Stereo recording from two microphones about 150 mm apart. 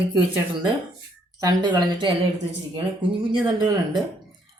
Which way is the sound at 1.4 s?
30° right (ahead or behind).